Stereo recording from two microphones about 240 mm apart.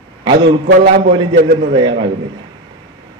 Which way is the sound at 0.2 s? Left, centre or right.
Centre.